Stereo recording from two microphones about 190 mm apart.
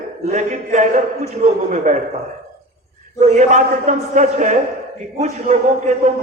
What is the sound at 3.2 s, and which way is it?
A man's voice, 40° right (ahead or behind).